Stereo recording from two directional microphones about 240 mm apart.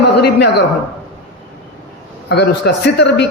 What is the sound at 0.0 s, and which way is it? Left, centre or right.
Speech, left.